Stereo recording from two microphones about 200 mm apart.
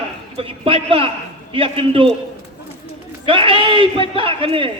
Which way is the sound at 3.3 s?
25° right (ahead or behind).